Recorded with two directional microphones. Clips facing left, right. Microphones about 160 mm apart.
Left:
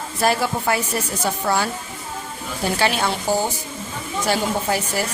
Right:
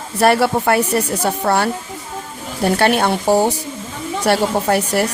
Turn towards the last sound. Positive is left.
turn(degrees=-65)  # may be behind; listen again after turning